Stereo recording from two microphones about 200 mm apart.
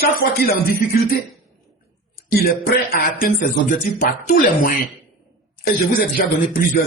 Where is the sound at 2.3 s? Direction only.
50° left (ahead or behind).